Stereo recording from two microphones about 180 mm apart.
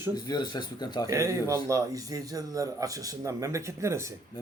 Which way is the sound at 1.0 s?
15° right (ahead or behind).